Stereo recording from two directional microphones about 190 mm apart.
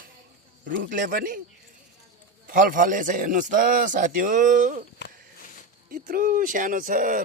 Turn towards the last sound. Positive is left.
turn(degrees=-45)  # may be behind; listen again after turning